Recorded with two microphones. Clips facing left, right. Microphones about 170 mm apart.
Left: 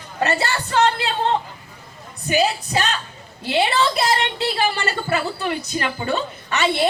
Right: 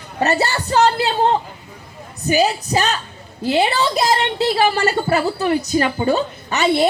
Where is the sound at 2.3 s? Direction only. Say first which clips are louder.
Right 3 dB; 40° right (ahead or behind).